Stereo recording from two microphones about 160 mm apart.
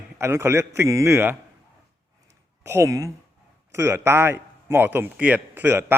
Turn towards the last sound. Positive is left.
turn(degrees=-10)  # may be behind; listen again after turning